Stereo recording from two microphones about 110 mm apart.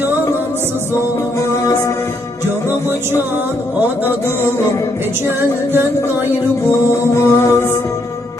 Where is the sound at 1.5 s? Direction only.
25° left (ahead or behind).